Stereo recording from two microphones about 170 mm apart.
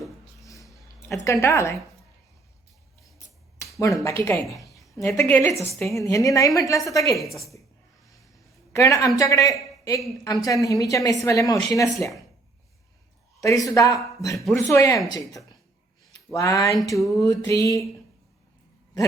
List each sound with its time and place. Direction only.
0.4 s a sound: 20° left (ahead or behind)
1.2 s a woman's voice: 15° left (ahead or behind)
3.2 s finger snapping: 20° left (ahead or behind)
3.8 s speech: 20° left (ahead or behind)
4.4 s a woman's voice: centre (ahead or behind)
4.7 s a woman's voice: 15° left (ahead or behind)
8.7 s speech: 20° left (ahead or behind)
13.4 s speech: 20° left (ahead or behind)